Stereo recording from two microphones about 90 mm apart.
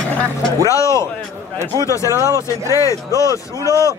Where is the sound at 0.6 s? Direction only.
35° left (ahead or behind).